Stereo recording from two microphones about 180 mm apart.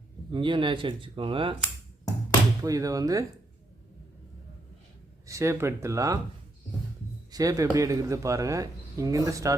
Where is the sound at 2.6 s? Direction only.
20° right (ahead or behind).